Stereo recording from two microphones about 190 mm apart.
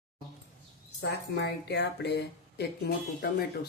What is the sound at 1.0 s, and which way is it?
Speech, 60° left (ahead or behind).